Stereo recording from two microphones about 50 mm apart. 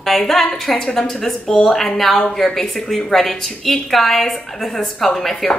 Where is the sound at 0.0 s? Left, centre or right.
Centre.